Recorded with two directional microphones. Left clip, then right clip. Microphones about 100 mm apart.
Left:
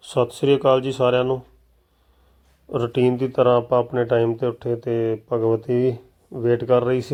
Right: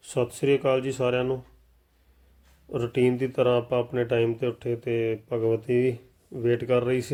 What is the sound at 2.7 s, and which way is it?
Speech, 15° left (ahead or behind).